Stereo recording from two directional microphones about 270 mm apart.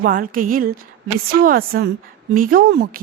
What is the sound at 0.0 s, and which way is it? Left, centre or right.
A woman's voice, right.